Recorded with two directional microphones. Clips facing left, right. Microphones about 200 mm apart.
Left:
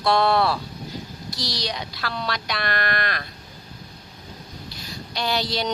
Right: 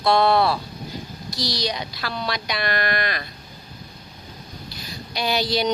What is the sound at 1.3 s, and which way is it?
Speech, 30° left (ahead or behind).